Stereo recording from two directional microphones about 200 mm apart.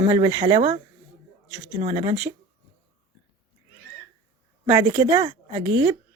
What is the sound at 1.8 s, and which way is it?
Speech, 30° right (ahead or behind).